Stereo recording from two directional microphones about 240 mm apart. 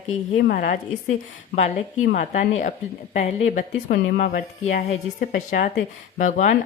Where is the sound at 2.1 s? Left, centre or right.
Left.